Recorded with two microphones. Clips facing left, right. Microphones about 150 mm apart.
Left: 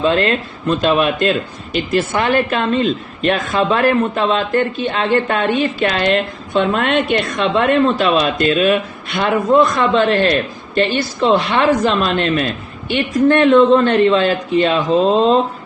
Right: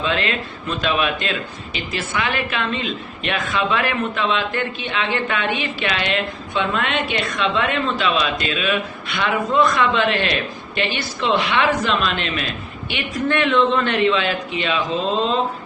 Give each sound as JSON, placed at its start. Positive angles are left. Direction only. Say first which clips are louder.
{"t": 0.8, "sound": "speech", "louder": "left 6 dB", "side_deg": 45}